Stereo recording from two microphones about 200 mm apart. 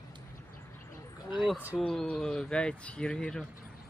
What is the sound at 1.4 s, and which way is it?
Speech, 5° right (ahead or behind).